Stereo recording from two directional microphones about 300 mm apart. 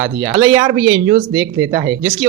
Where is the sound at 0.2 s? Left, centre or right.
Centre.